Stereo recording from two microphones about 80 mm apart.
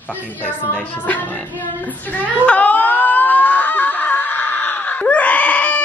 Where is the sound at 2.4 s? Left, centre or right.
Centre.